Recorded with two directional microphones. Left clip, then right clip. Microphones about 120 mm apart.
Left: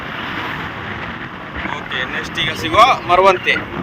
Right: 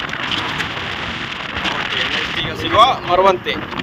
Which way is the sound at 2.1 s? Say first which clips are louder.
Even; 5° left (ahead or behind).